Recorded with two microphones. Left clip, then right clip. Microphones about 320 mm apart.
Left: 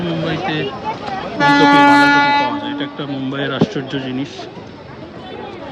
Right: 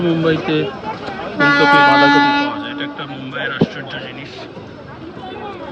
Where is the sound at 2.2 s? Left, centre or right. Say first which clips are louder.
Left 1 dB; left.